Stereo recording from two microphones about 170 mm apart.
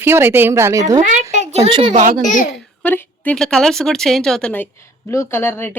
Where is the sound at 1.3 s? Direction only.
40° right (ahead or behind).